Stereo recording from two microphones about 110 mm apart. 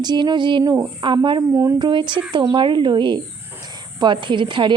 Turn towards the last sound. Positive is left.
turn(degrees=-45)  # may be behind; listen again after turning